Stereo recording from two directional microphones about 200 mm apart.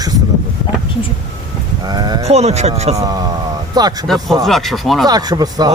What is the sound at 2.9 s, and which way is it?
Speech, 20° right (ahead or behind).